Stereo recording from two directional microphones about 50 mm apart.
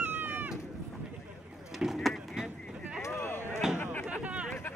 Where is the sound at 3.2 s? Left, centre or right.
Left.